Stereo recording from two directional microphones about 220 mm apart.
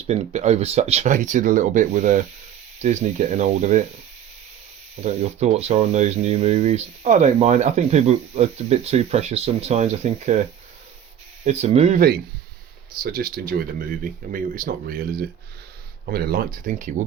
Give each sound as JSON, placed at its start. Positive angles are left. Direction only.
{"t": 0.1, "sound": "speech", "side_deg": -30}
{"t": 5.0, "sound": "speech", "side_deg": -30}
{"t": 11.4, "sound": "speech", "side_deg": -30}
{"t": 13.0, "sound": "speech", "side_deg": -45}